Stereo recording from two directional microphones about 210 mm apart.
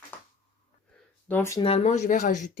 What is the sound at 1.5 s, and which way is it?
Speech, 30° left (ahead or behind).